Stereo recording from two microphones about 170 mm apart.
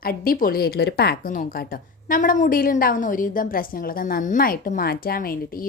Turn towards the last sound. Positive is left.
turn(degrees=55)  # may be behind; listen again after turning